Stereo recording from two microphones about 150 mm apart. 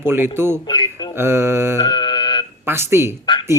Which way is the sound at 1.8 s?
30° left (ahead or behind).